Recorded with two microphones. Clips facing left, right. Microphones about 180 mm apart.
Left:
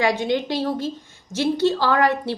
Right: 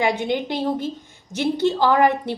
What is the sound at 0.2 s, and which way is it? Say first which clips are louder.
Speech: left 1 dB; 20° right (ahead or behind).